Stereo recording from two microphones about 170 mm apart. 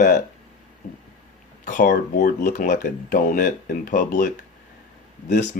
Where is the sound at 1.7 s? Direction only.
50° left (ahead or behind).